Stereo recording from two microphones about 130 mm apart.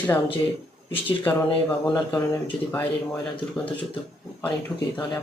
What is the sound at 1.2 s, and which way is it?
Speech, 15° left (ahead or behind).